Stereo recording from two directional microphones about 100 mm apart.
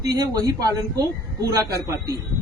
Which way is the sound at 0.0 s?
35° right (ahead or behind).